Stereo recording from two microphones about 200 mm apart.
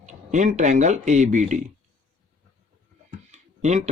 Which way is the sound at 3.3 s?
35° right (ahead or behind).